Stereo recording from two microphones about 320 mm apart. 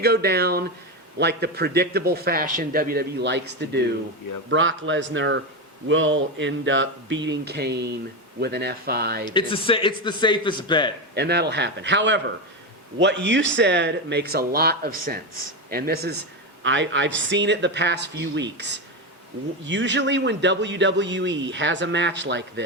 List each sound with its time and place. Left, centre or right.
0.0 s a man's voice: right
9.3 s a man's voice: centre
11.1 s a man's voice: right